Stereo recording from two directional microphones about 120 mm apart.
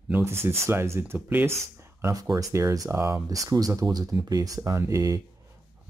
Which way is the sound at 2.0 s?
30° right (ahead or behind).